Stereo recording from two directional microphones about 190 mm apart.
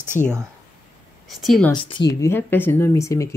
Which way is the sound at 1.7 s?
25° left (ahead or behind).